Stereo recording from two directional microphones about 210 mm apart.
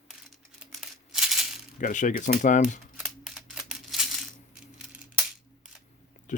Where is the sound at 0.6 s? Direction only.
Centre (ahead or behind).